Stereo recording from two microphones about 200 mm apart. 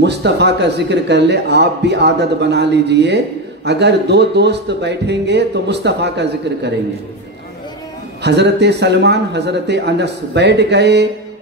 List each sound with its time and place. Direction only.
0.0 s speech: 60° right (ahead or behind)
8.2 s speech: 55° right (ahead or behind)